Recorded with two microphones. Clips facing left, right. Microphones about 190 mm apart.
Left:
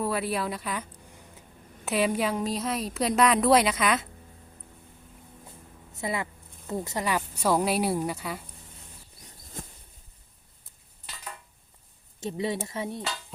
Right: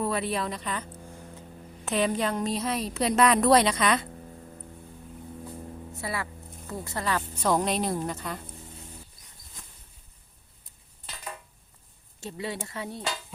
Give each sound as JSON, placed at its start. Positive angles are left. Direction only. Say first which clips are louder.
{"t": 0.0, "sound": "a woman's voice", "louder": "even", "side_deg": 5}
{"t": 6.0, "sound": "a woman's voice", "louder": "left 4 dB", "side_deg": 20}
{"t": 12.2, "sound": "speech", "louder": "left 5 dB", "side_deg": 20}